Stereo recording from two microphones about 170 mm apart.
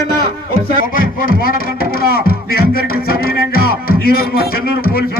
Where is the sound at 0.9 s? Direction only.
55° left (ahead or behind).